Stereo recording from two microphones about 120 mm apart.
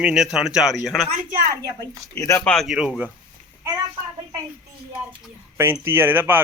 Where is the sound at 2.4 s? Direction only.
5° left (ahead or behind).